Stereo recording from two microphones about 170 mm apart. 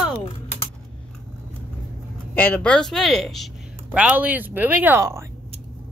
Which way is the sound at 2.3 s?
10° left (ahead or behind).